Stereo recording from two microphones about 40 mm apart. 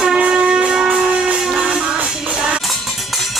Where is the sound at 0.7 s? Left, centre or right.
Centre.